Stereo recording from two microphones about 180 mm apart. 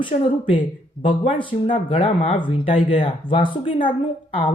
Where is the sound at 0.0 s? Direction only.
30° left (ahead or behind).